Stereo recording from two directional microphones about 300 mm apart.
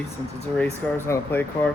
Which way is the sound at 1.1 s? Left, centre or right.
Centre.